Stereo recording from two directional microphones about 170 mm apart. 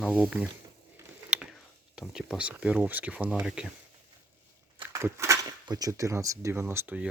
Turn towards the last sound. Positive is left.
turn(degrees=-10)  # may be behind; listen again after turning